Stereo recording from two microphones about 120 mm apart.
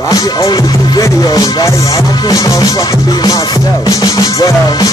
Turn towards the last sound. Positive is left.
turn(degrees=30)  # may be behind; listen again after turning